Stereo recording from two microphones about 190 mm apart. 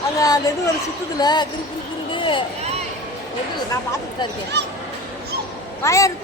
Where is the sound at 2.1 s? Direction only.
25° left (ahead or behind).